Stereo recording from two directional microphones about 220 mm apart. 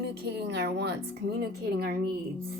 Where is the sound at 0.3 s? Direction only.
50° right (ahead or behind).